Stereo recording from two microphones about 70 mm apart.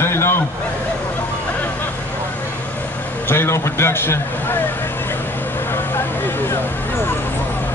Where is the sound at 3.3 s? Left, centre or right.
Left.